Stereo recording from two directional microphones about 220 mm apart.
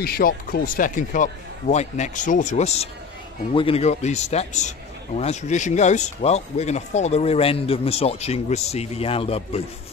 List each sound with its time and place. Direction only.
0.0 s a man's voice: 40° left (ahead or behind); by 9.6 s 25° left (ahead or behind)